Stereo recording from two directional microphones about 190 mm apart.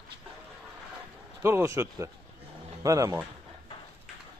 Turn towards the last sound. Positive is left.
turn(degrees=-15)  # may be behind; listen again after turning